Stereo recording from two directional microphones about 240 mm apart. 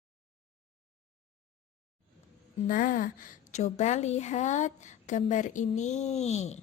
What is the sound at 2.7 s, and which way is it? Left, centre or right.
A woman's voice, left.